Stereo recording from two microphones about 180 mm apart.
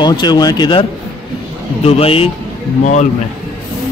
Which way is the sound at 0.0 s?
25° left (ahead or behind).